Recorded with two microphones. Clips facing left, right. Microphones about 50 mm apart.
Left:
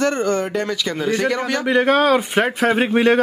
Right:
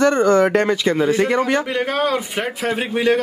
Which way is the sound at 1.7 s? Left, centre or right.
Left.